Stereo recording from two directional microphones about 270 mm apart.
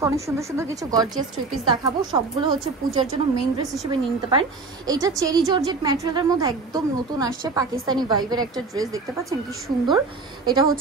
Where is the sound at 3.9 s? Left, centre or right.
Centre.